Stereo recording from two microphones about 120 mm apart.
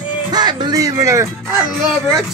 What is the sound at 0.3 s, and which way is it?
Speech, 35° right (ahead or behind).